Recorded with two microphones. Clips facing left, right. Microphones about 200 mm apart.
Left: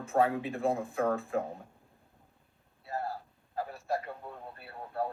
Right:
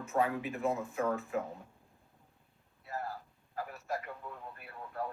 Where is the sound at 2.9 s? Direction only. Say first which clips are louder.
Left 4 dB; 30° left (ahead or behind).